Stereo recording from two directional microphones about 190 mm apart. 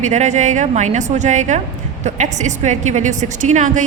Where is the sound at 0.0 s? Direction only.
40° right (ahead or behind).